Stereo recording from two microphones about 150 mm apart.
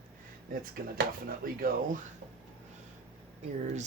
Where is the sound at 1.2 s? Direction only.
75° right (ahead or behind).